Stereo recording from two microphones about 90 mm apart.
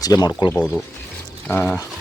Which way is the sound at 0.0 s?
45° left (ahead or behind).